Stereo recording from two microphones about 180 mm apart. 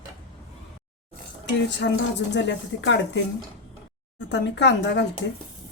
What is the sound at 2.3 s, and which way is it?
Speech, 80° left.